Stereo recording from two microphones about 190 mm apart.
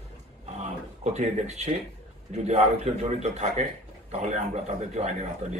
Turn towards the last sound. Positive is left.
turn(degrees=-35)  # may be behind; listen again after turning